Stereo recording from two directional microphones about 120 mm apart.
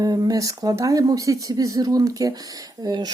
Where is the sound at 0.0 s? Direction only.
30° right (ahead or behind).